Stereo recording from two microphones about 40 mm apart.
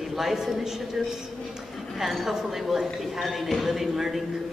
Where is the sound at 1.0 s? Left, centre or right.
Centre.